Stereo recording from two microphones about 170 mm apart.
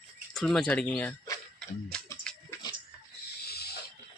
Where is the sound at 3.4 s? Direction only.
70° left (ahead or behind).